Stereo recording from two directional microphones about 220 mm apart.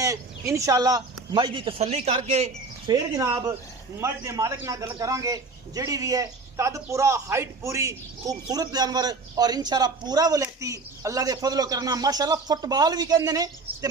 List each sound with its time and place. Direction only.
0.0 s speech: 15° right (ahead or behind)
2.9 s a man's voice: 15° right (ahead or behind)